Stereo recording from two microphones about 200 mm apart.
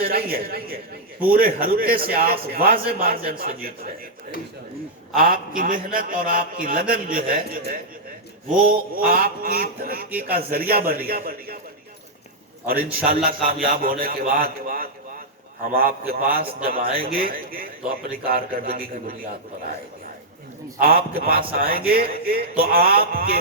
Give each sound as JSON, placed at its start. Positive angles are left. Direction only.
{"t": 0.0, "sound": "a man's voice", "side_deg": -50}
{"t": 5.1, "sound": "a man's voice", "side_deg": -45}
{"t": 13.1, "sound": "a man's voice", "side_deg": -45}
{"t": 20.7, "sound": "a man's voice", "side_deg": -45}